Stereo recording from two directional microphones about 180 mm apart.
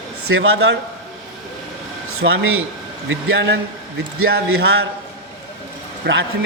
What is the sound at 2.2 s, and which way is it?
A man's voice, 85° right.